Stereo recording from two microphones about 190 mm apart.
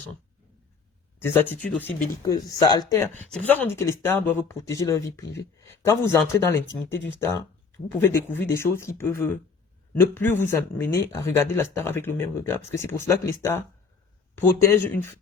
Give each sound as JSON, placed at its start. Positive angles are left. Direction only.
{"t": 1.2, "sound": "speech", "side_deg": 10}
{"t": 3.2, "sound": "speech", "side_deg": 5}
{"t": 5.2, "sound": "speech", "side_deg": 65}
{"t": 5.5, "sound": "speech", "side_deg": 15}